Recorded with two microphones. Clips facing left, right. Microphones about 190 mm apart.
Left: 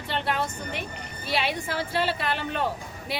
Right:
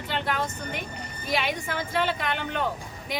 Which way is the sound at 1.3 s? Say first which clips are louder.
Even; 35° left (ahead or behind).